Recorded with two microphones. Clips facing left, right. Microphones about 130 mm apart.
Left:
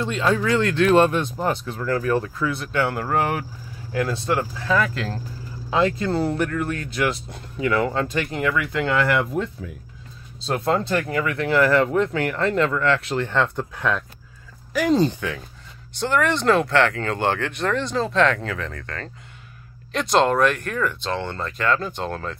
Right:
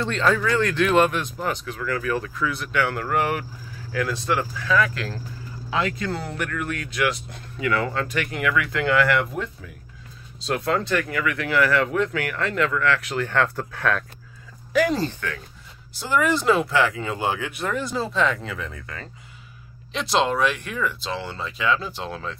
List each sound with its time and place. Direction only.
0.0 s speech: 10° left (ahead or behind)
0.3 s speech: 25° left (ahead or behind)
10.4 s speech: 30° left (ahead or behind)
15.9 s speech: 5° right (ahead or behind)